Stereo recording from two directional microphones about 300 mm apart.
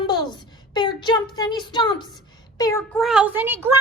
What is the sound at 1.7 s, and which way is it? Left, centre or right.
A woman's voice, centre.